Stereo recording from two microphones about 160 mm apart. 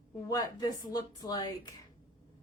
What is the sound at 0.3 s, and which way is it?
Speech, 20° left (ahead or behind).